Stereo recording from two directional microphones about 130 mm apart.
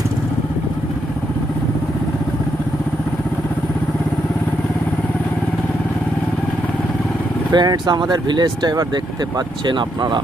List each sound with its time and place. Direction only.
7.5 s speech: 35° right (ahead or behind)